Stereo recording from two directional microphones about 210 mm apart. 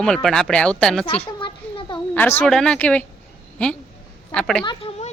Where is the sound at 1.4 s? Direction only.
20° left (ahead or behind).